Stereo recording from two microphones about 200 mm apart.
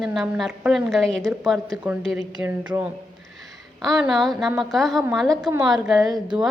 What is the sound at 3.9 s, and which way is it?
A woman's voice, centre (ahead or behind).